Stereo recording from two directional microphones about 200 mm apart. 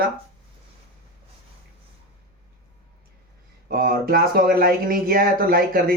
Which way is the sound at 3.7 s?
45° right (ahead or behind).